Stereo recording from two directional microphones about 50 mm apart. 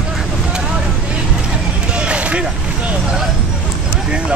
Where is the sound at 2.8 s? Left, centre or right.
Right.